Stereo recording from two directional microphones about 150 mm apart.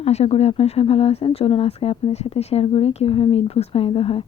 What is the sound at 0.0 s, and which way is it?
Speech, 45° left (ahead or behind).